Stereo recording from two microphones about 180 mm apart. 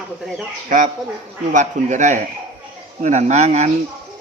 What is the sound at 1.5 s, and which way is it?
Speech, 45° right (ahead or behind).